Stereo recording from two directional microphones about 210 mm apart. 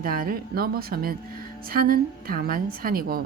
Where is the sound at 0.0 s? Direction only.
45° right (ahead or behind).